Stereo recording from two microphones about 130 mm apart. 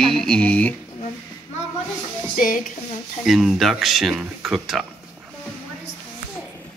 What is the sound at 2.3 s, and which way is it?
Speech, 90° left.